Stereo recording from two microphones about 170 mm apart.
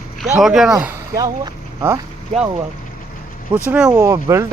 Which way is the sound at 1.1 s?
20° right (ahead or behind).